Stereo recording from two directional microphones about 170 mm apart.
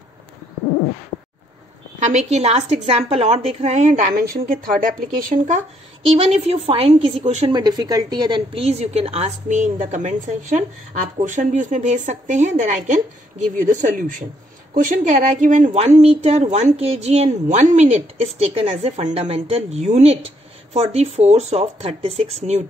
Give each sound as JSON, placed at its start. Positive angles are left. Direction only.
{"t": 2.0, "sound": "a woman's voice", "side_deg": -45}
{"t": 4.1, "sound": "a woman's voice", "side_deg": -60}
{"t": 6.1, "sound": "a woman's voice", "side_deg": -40}
{"t": 7.5, "sound": "a woman's voice", "side_deg": -25}